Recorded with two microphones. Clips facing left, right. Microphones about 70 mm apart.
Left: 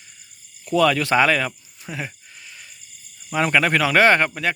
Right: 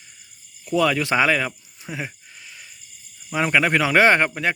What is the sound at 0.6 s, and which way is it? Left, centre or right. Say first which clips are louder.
Speech: left 2 dB; centre.